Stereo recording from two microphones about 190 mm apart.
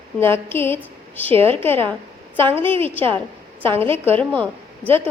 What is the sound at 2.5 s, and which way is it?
Speech, 30° right (ahead or behind).